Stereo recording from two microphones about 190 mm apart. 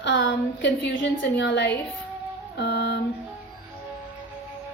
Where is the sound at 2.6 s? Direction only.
60° left (ahead or behind).